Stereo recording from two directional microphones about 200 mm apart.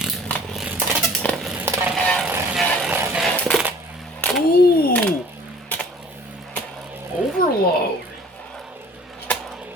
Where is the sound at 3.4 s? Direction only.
5° left (ahead or behind).